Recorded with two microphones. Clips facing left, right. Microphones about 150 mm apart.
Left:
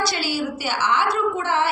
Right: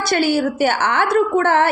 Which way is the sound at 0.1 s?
55° right (ahead or behind).